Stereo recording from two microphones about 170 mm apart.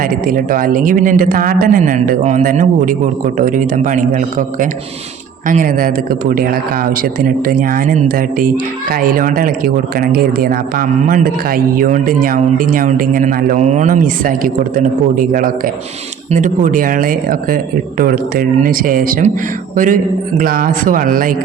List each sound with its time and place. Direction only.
0.0 s a man's voice: 55° right (ahead or behind)